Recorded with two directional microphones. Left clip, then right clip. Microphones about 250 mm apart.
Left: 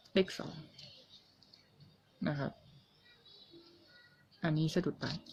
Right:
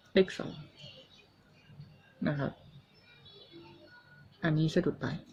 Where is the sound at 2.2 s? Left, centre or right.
Centre.